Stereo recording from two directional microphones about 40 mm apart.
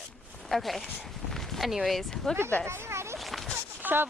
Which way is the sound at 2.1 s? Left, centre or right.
Centre.